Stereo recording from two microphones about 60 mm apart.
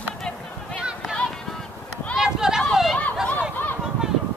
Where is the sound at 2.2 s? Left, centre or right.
Centre.